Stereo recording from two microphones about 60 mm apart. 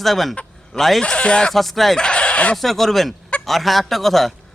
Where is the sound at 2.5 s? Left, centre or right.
Centre.